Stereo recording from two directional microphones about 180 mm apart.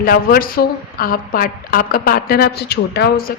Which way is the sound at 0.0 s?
55° left (ahead or behind).